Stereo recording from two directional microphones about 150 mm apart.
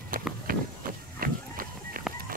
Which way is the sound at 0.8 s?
70° right (ahead or behind).